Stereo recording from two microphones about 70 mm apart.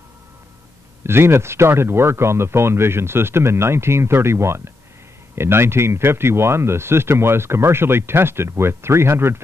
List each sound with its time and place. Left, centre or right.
1.0 s speech: right